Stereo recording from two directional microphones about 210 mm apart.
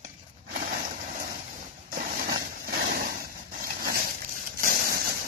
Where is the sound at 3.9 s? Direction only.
45° right (ahead or behind).